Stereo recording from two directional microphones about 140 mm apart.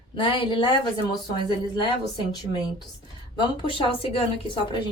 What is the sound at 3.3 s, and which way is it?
Speech, 40° left (ahead or behind).